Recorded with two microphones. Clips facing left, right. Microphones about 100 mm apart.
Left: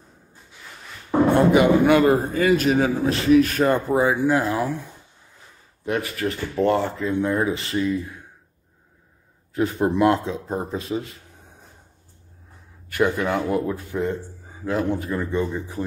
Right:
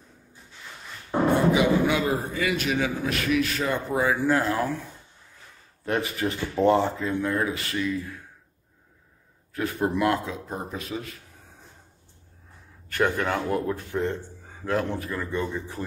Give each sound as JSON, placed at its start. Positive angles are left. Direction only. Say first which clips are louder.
{"t": 1.3, "sound": "a man's voice", "louder": "left 5 dB", "side_deg": 55}
{"t": 3.4, "sound": "speech", "louder": "left 7 dB", "side_deg": 50}
{"t": 3.9, "sound": "speech", "louder": "left 4 dB", "side_deg": 20}
{"t": 5.9, "sound": "speech", "louder": "left 1 dB", "side_deg": -25}
{"t": 7.1, "sound": "speech", "louder": "left 4 dB", "side_deg": 20}
{"t": 9.5, "sound": "speech", "louder": "left 5 dB", "side_deg": 25}
{"t": 12.9, "sound": "speech", "louder": "left 3 dB", "side_deg": 10}
{"t": 15.0, "sound": "speech", "louder": "left 5 dB", "side_deg": 25}